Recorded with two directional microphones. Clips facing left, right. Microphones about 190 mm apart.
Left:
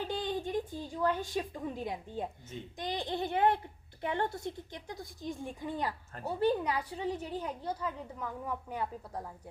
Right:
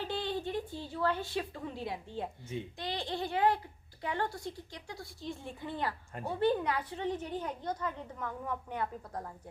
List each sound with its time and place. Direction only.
0.0 s a woman's voice: 15° left (ahead or behind)